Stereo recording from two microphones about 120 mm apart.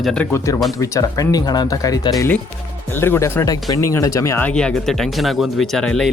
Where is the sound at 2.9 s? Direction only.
20° left (ahead or behind).